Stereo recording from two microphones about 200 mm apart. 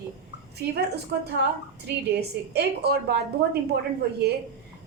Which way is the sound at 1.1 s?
55° right (ahead or behind).